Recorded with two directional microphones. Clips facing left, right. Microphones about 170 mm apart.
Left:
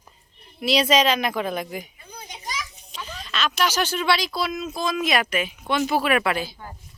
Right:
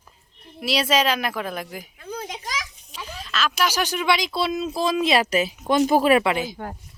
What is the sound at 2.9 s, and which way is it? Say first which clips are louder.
Speech: right 1 dB; 10° right (ahead or behind).